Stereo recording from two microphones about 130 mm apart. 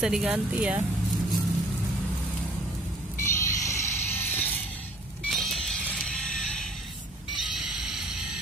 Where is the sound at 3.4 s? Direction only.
25° left (ahead or behind).